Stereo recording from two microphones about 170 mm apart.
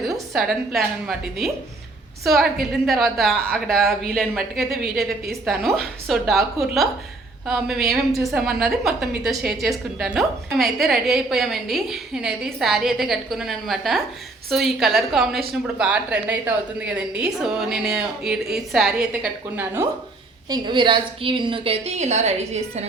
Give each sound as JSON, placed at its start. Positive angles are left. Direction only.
{"t": 0.3, "sound": "a woman's voice", "side_deg": 0}
{"t": 7.4, "sound": "a woman's voice", "side_deg": 0}
{"t": 20.5, "sound": "a woman's voice", "side_deg": -30}